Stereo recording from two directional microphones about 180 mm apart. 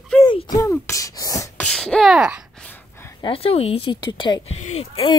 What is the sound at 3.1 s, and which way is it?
Speech, 30° left (ahead or behind).